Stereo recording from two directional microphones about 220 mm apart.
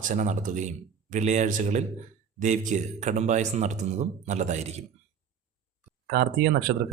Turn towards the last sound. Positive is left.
turn(degrees=-45)  # may be behind; listen again after turning